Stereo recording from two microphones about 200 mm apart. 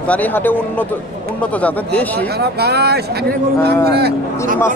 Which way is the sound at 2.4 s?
55° right (ahead or behind).